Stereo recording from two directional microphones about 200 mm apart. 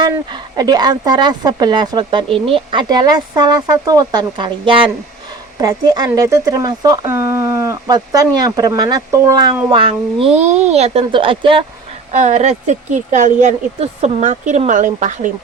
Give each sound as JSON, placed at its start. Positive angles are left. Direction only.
{"t": 0.0, "sound": "speech", "side_deg": -20}